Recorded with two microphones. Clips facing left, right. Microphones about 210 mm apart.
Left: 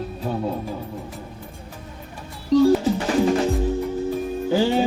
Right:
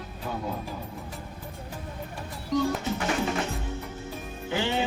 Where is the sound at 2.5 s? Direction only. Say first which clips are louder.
Left 11 dB; 30° left (ahead or behind).